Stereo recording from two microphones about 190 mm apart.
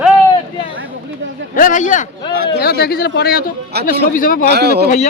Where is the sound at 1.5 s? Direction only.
45° left (ahead or behind).